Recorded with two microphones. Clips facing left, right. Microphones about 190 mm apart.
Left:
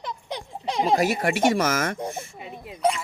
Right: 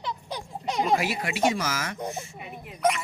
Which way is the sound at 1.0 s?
50° left (ahead or behind).